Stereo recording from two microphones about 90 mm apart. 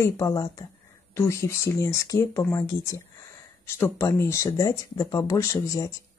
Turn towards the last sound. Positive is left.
turn(degrees=35)  # may be behind; listen again after turning